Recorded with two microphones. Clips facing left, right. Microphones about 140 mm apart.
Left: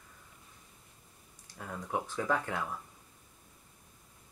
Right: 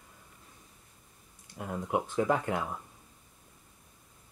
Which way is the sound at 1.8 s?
15° right (ahead or behind).